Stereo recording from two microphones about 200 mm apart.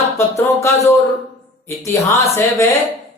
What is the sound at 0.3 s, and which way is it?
Speech, 15° left (ahead or behind).